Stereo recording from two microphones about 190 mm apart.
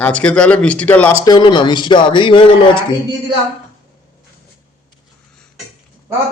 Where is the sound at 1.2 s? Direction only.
20° left (ahead or behind).